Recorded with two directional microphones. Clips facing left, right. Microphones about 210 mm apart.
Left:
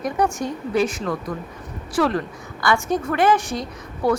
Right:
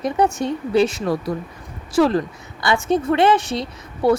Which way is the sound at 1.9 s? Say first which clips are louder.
Right 4 dB; 30° right (ahead or behind).